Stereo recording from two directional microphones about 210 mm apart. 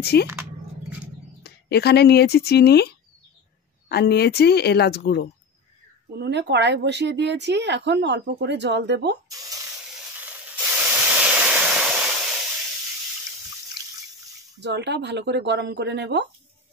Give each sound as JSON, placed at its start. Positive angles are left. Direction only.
{"t": 0.0, "sound": "speech", "side_deg": 50}
{"t": 0.3, "sound": "a sound", "side_deg": -5}
{"t": 1.4, "sound": "speech", "side_deg": 50}
{"t": 3.9, "sound": "speech", "side_deg": 50}
{"t": 6.1, "sound": "a woman's voice", "side_deg": -55}
{"t": 10.2, "sound": "hiss", "side_deg": -5}
{"t": 14.6, "sound": "a woman's voice", "side_deg": -55}